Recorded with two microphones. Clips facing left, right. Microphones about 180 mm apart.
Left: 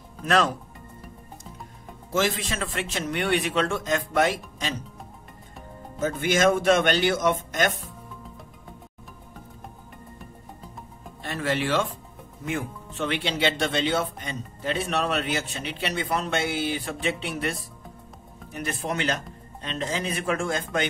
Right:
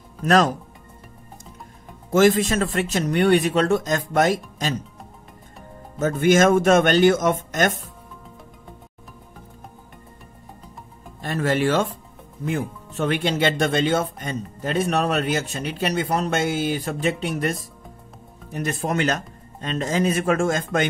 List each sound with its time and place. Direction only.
0.2 s speech: 40° right (ahead or behind)
2.1 s a man's voice: 45° right (ahead or behind)
5.9 s speech: 50° right (ahead or behind)
11.2 s speech: 45° right (ahead or behind)